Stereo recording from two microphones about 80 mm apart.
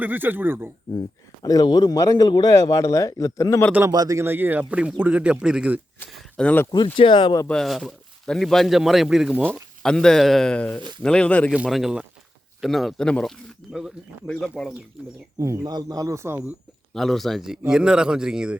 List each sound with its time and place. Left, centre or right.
0.0 s speech: right
1.5 s speech: left
3.9 s speech: right
4.2 s speech: right
6.3 s speech: centre
6.7 s speech: left
7.4 s a man's voice: centre
9.8 s speech: centre
11.7 s a man's voice: centre
13.1 s speech: centre
15.6 s speech: right
16.1 s speech: right
16.9 s a man's voice: centre